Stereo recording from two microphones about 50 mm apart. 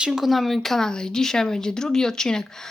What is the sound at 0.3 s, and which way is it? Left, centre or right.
Speech, centre.